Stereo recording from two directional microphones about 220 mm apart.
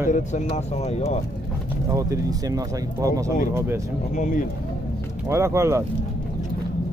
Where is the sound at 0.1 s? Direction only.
35° left (ahead or behind).